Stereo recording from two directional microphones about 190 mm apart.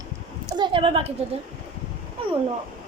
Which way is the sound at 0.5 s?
25° right (ahead or behind).